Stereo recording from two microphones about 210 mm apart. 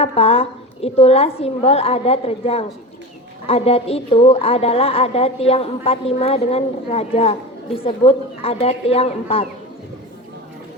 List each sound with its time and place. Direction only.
0.0 s a woman's voice: 30° left (ahead or behind)